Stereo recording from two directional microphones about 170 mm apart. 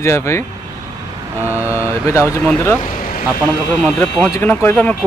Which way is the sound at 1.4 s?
10° right (ahead or behind).